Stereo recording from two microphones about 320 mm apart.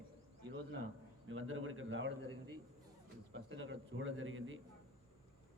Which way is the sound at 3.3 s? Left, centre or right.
Right.